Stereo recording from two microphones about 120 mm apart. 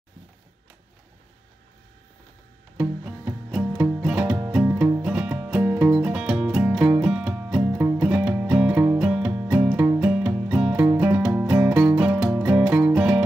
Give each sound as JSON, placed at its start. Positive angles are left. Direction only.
{"t": 2.8, "sound": "music", "side_deg": -10}
{"t": 10.9, "sound": "music", "side_deg": -25}
{"t": 11.1, "sound": "music", "side_deg": -10}
{"t": 11.5, "sound": "music", "side_deg": -20}